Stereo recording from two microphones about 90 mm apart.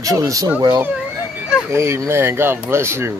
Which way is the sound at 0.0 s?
40° right (ahead or behind).